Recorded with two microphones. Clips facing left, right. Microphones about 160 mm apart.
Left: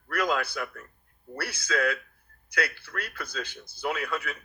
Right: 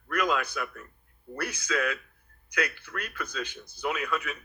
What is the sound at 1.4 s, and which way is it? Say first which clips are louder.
A man's voice: left 1 dB; 35° left (ahead or behind).